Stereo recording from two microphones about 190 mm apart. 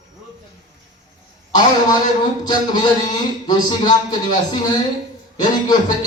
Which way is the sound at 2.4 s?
20° left (ahead or behind).